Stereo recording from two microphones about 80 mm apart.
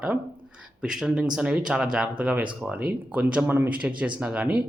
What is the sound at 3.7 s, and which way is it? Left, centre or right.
Speech, centre.